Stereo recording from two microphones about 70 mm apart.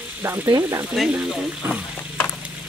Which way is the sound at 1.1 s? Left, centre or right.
Right.